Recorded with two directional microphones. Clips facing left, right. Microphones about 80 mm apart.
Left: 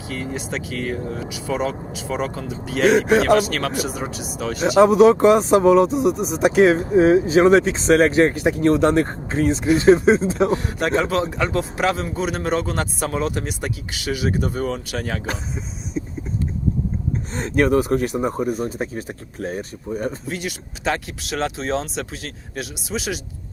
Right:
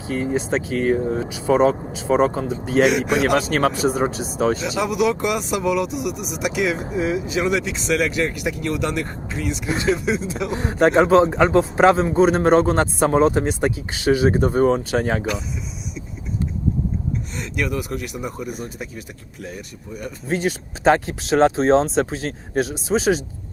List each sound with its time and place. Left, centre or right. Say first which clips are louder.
0.1 s a man's voice: right 6 dB; right
0.9 s speech: right 6 dB; centre
1.2 s a man's voice: right 7 dB; right
3.1 s speech: left 3 dB; left
3.3 s a man's voice: even; right
4.6 s speech: left 8 dB; left
10.6 s a man's voice: right 5 dB; right
17.3 s speech: left 9 dB; left
20.2 s a man's voice: right 6 dB; right